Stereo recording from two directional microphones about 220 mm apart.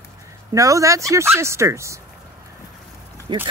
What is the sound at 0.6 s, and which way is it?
Speech, 15° right (ahead or behind).